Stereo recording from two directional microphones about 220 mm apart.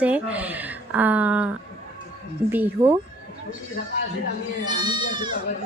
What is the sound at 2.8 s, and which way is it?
Speech, 25° right (ahead or behind).